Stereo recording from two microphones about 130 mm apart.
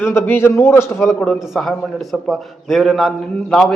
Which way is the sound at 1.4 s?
Centre (ahead or behind).